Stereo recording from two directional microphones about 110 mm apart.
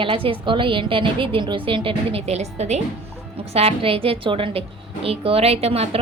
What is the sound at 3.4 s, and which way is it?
A woman's voice, 70° right (ahead or behind).